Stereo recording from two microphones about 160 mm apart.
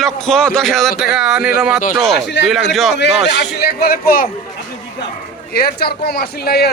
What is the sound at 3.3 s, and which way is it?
Speech, 90° left.